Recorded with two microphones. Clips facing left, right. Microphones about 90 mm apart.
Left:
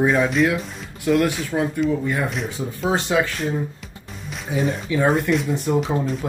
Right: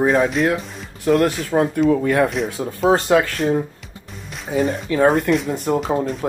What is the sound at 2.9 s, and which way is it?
Speech, 45° right (ahead or behind).